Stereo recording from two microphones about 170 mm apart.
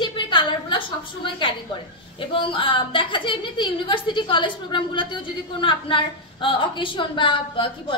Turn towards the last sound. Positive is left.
turn(degrees=30)  # may be behind; listen again after turning